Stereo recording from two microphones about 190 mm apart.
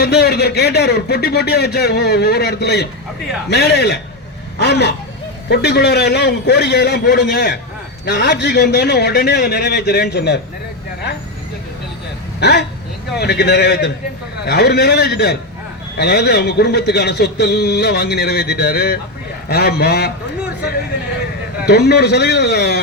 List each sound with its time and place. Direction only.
0.0 s speech: 60° left (ahead or behind)
12.4 s speech: 60° left (ahead or behind)
21.7 s speech: 60° left (ahead or behind)